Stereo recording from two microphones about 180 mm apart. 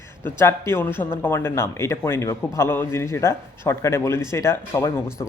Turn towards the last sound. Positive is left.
turn(degrees=15)  # may be behind; listen again after turning